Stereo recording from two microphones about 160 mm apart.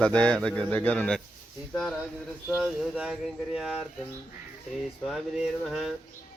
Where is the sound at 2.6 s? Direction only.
Centre (ahead or behind).